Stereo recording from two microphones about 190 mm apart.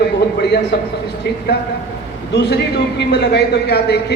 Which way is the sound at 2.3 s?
60° left (ahead or behind).